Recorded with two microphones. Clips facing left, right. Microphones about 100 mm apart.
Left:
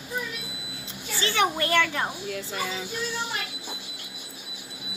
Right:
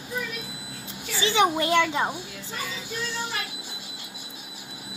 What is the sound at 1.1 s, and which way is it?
A child's voice, 15° right (ahead or behind).